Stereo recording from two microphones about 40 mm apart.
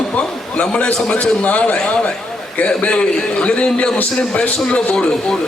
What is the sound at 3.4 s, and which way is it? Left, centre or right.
A man's voice, left.